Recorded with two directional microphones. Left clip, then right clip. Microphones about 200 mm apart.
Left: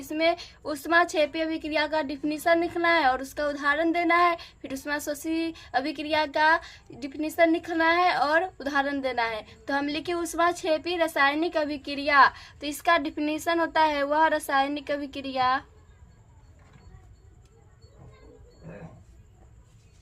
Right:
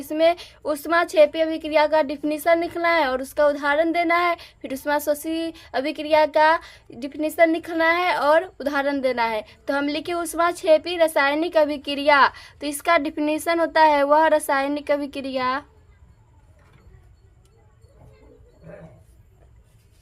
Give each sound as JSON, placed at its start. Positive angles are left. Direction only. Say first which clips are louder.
{"t": 0.0, "sound": "a woman's voice", "louder": "right 6 dB", "side_deg": -30}